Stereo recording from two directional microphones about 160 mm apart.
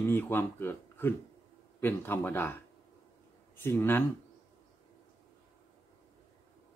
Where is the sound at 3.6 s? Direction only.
15° left (ahead or behind).